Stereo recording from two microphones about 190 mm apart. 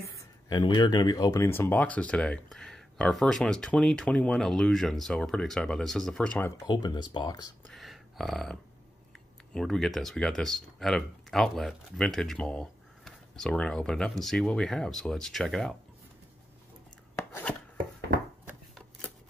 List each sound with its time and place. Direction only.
0.0 s speech: 15° left (ahead or behind)
6.7 s speech: 20° left (ahead or behind)
7.6 s a sound: centre (ahead or behind)
9.5 s speech: centre (ahead or behind)
17.1 s chopping: 10° left (ahead or behind)